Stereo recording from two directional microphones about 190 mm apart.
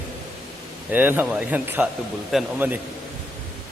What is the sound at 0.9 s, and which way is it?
Speech, 10° right (ahead or behind).